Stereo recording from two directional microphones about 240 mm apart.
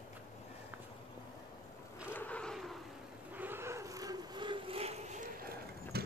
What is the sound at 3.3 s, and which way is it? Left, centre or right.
Vehicle, centre.